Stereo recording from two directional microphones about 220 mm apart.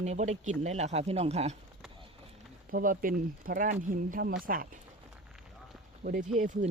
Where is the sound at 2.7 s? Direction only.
40° right (ahead or behind).